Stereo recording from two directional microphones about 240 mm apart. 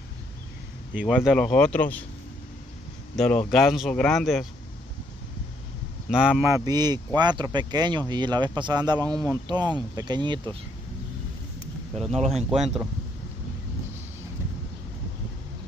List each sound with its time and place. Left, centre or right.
0.9 s speech: centre
3.2 s speech: centre
6.0 s speech: centre
12.1 s speech: right